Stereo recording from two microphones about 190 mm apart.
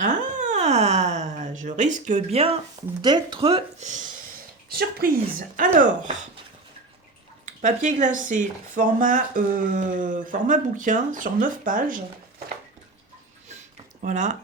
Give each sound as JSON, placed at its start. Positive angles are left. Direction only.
{"t": 0.0, "sound": "a sound", "side_deg": -40}
{"t": 3.0, "sound": "speech", "side_deg": -25}
{"t": 3.9, "sound": "a sound", "side_deg": -45}
{"t": 4.7, "sound": "speech", "side_deg": -55}
{"t": 7.4, "sound": "speech", "side_deg": -40}
{"t": 14.0, "sound": "speech", "side_deg": -40}